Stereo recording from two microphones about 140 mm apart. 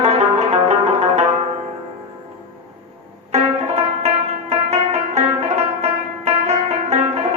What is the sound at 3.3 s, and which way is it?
Music, 50° right (ahead or behind).